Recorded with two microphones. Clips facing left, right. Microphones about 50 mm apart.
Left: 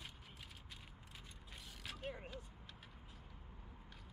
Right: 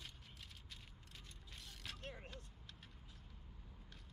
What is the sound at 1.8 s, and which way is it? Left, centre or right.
Vehicle, centre.